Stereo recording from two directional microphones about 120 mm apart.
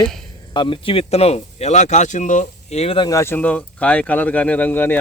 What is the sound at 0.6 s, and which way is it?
Speech, 45° left (ahead or behind).